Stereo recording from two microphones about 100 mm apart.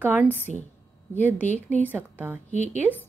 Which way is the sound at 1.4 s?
15° left (ahead or behind).